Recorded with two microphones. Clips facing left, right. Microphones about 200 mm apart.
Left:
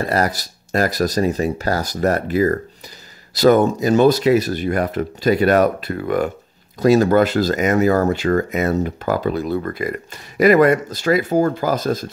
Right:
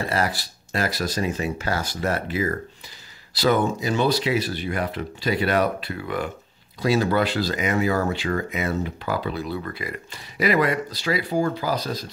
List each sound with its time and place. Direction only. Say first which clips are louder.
0.0 s speech: left 5 dB; 40° left (ahead or behind)